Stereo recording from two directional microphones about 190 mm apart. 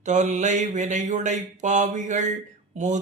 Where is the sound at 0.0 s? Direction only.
40° right (ahead or behind).